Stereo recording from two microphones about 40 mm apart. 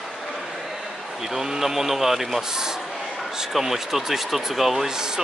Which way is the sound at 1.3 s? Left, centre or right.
Centre.